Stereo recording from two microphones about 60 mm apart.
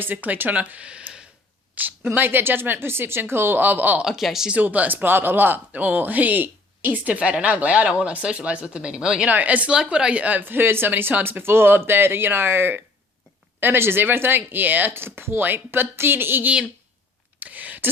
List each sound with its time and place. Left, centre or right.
0.0 s speech: right
2.0 s speech: right
4.0 s speech: centre
4.6 s speech: right
9.3 s speech: right
9.7 s speech: centre; by 16.5 s right
17.4 s a sound: right